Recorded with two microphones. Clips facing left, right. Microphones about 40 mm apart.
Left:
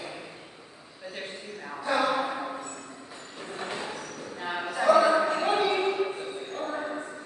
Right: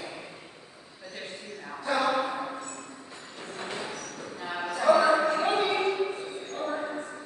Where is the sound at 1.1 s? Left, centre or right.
Centre.